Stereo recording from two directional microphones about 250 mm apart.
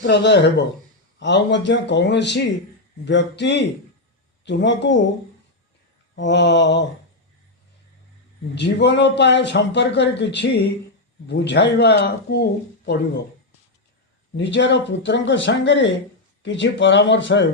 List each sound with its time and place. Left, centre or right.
0.0 s a man's voice: left
6.1 s a man's voice: left
8.5 s a man's voice: left
14.3 s a man's voice: left